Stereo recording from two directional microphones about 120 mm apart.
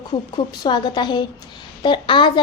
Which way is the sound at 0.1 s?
35° left (ahead or behind).